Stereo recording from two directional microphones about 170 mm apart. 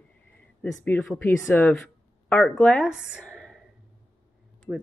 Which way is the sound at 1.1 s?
15° left (ahead or behind).